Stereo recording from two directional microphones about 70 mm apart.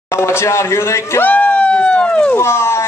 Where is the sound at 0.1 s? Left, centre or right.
Left.